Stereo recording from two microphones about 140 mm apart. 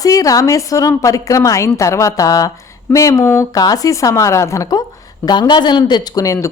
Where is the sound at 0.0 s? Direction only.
25° left (ahead or behind).